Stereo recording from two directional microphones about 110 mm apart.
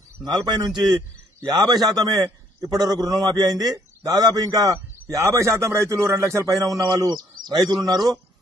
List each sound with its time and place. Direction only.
0.2 s a man's voice: 40° right (ahead or behind); by 6.5 s 25° right (ahead or behind)
6.9 s a man's voice: 40° right (ahead or behind)